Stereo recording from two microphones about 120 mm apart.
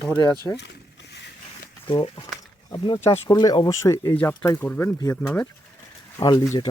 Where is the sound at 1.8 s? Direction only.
45° left (ahead or behind); by 5.4 s 15° left (ahead or behind).